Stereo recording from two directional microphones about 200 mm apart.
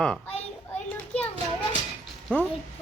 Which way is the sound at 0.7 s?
5° left (ahead or behind).